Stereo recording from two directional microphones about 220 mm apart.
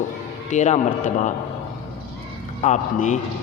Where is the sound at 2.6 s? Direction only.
35° left (ahead or behind).